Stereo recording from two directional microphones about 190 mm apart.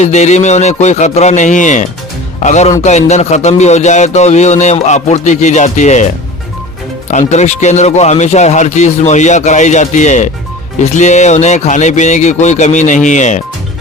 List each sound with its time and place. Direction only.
0.0 s speech: 35° left (ahead or behind)
7.1 s speech: 40° left (ahead or behind)